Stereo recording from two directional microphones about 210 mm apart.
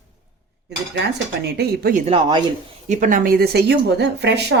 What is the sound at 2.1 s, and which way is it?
Speech, 20° right (ahead or behind).